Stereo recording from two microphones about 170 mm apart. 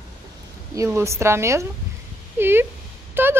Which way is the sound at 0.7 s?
15° right (ahead or behind).